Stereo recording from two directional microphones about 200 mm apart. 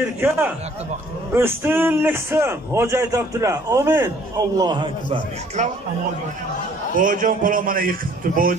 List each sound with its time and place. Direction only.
0.0 s a man's voice: 10° right (ahead or behind)
4.6 s a man's voice: 20° right (ahead or behind)
5.6 s speech: 35° right (ahead or behind)
7.0 s a man's voice: 40° right (ahead or behind)